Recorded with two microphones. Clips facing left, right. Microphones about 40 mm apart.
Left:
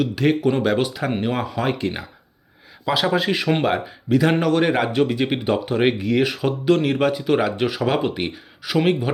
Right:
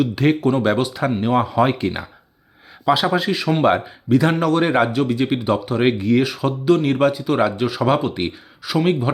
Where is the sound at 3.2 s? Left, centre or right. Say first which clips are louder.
Even; centre.